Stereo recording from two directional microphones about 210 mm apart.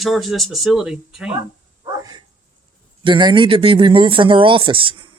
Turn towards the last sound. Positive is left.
turn(degrees=-25)  # may be behind; listen again after turning